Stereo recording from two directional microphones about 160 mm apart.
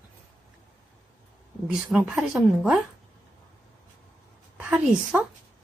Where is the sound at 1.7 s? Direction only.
10° right (ahead or behind).